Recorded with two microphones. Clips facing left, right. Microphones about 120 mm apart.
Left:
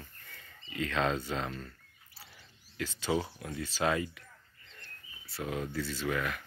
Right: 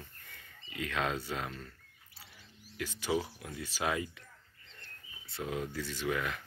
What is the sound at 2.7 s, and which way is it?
Speech, 15° right (ahead or behind).